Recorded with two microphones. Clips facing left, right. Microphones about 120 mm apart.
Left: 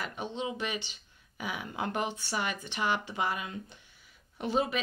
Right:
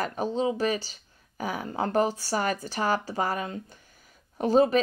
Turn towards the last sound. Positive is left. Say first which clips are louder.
# right 9 dB
turn(degrees=-40)  # may be behind; listen again after turning